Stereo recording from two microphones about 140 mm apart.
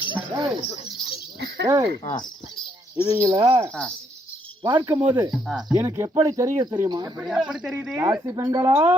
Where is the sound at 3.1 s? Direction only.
25° right (ahead or behind).